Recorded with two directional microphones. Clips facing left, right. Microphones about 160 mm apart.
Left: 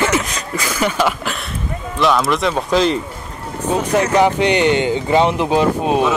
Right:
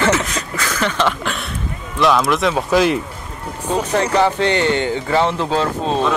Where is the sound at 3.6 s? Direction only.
10° left (ahead or behind).